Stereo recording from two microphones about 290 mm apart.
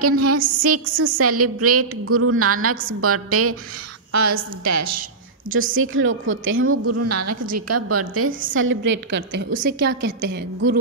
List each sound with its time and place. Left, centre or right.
0.0 s a woman's voice: right
4.1 s a woman's voice: right
5.8 s a woman's voice: right
8.3 s a woman's voice: right
8.5 s a woman's voice: right